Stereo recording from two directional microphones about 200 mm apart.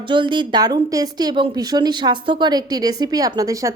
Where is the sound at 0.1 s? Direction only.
25° right (ahead or behind).